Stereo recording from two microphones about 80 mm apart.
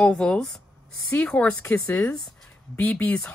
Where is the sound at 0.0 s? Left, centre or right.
Centre.